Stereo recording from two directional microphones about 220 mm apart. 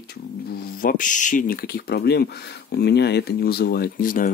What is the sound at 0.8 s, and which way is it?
Speech, 35° left (ahead or behind).